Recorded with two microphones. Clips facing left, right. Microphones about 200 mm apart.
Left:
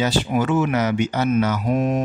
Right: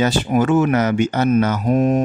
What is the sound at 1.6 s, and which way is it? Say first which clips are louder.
Mantra: right 4 dB; 40° right (ahead or behind).